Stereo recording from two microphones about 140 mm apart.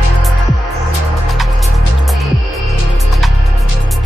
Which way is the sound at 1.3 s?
Centre (ahead or behind).